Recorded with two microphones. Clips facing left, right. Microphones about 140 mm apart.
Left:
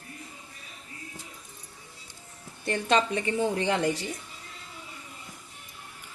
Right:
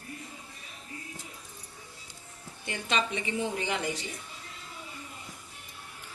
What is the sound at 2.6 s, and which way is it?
A woman's voice, 45° left (ahead or behind).